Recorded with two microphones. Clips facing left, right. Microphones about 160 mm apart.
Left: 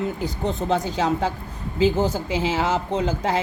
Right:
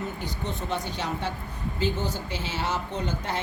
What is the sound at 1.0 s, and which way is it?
Speech, 90° left.